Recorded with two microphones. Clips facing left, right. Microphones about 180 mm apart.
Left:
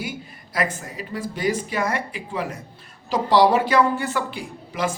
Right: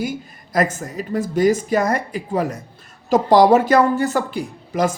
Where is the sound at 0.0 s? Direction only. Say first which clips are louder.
Right 7 dB; 45° right (ahead or behind).